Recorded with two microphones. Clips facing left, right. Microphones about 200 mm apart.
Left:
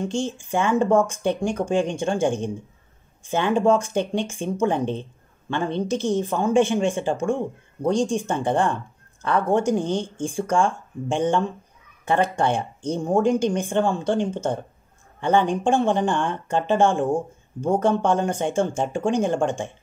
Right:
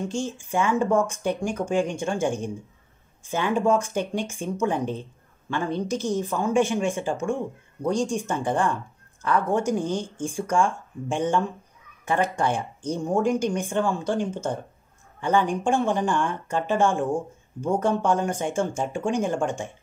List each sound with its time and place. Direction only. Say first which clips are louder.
0.5 s speech: left 3 dB; 30° left (ahead or behind)
3.5 s speech: left 3 dB; 30° left (ahead or behind)